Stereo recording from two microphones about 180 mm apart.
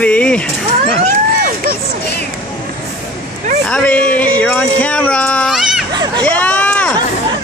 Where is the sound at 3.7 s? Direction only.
5° left (ahead or behind).